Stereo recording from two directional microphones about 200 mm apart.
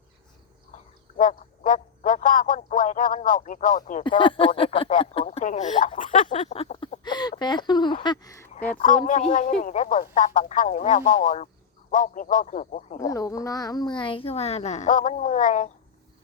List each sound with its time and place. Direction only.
1.2 s frog: 40° left (ahead or behind)
4.2 s speech: 25° left (ahead or behind)
8.7 s speech: 40° left (ahead or behind)
13.1 s speech: 15° left (ahead or behind); by 15.7 s 40° left (ahead or behind)